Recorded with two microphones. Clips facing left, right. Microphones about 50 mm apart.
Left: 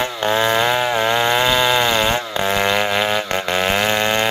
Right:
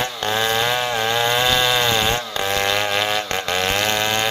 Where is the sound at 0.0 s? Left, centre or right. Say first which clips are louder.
Left 4 dB; centre.